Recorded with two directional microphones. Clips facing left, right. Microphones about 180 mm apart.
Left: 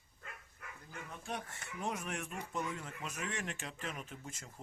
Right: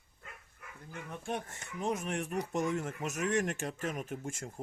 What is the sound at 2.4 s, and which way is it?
Speech, 80° right.